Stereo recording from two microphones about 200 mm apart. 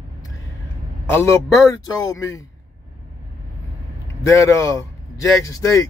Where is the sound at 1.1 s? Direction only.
15° left (ahead or behind).